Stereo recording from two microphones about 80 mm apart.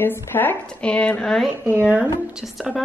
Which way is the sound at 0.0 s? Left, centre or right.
Left.